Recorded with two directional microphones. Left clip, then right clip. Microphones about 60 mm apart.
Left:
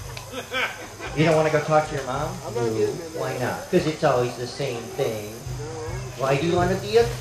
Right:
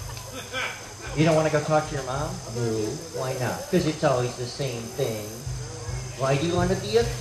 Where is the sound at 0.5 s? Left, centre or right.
Left.